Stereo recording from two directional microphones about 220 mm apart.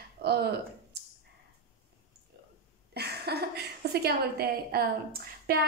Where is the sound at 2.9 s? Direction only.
45° right (ahead or behind).